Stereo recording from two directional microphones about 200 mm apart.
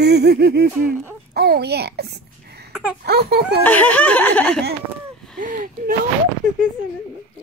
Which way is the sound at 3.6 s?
10° left (ahead or behind).